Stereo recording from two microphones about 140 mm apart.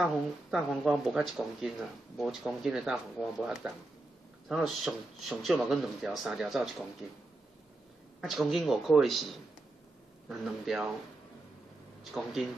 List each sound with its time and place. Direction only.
0.0 s speech: centre (ahead or behind)
8.2 s speech: centre (ahead or behind)
12.0 s speech: centre (ahead or behind)